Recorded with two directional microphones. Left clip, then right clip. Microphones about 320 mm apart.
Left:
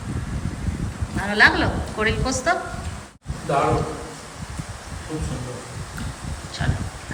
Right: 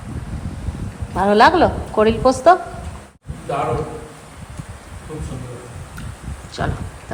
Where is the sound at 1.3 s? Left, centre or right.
Centre.